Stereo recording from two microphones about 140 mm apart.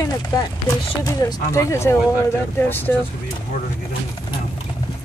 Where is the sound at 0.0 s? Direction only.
25° left (ahead or behind).